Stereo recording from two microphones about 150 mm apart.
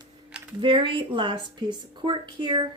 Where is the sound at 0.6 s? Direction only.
35° right (ahead or behind).